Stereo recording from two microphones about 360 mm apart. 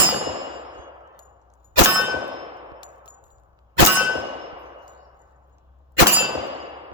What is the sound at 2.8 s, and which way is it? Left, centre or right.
Machine gun, centre.